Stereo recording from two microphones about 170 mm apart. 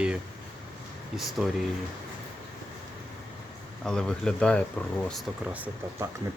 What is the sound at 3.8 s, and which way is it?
Speech, 5° left (ahead or behind).